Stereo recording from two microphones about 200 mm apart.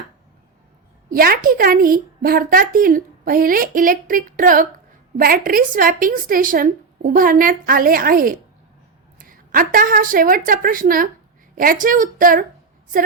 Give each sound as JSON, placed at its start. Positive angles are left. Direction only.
{"t": 1.1, "sound": "a woman's voice", "side_deg": -45}